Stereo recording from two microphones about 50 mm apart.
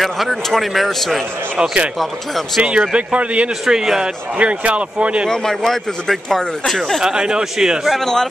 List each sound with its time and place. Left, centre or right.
0.0 s speech: centre
1.6 s speech: centre
2.0 s speech: centre
2.9 s speech: right
3.6 s speech: centre
4.4 s speech: right
5.3 s speech: centre
7.0 s speech: centre
7.9 s speech: centre